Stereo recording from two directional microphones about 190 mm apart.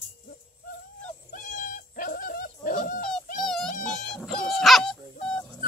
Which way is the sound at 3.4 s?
Centre (ahead or behind).